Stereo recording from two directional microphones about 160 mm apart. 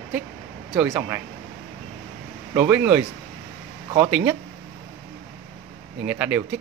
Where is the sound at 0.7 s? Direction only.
15° right (ahead or behind).